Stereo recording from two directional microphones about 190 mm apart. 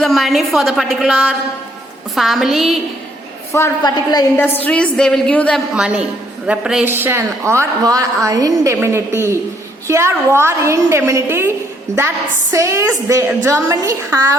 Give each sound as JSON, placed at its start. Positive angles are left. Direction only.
{"t": 0.0, "sound": "a woman's voice", "side_deg": 0}
{"t": 3.5, "sound": "a woman's voice", "side_deg": 20}
{"t": 4.6, "sound": "a woman's voice", "side_deg": 5}
{"t": 5.7, "sound": "a woman's voice", "side_deg": -5}